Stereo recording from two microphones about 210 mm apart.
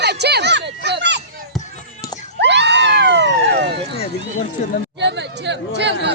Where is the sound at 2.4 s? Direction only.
55° right (ahead or behind).